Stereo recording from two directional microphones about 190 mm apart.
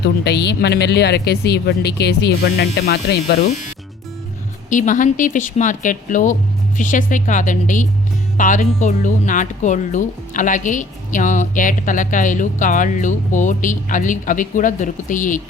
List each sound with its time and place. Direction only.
0.0 s a woman's voice: 60° left (ahead or behind)
4.7 s speech: 40° left (ahead or behind)